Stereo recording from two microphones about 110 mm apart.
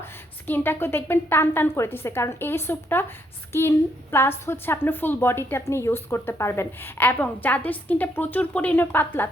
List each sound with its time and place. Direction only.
0.0 s a woman's voice: 20° left (ahead or behind)